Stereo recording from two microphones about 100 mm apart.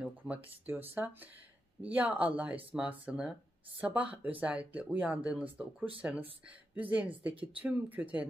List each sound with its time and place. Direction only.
0.9 s speech: 20° right (ahead or behind)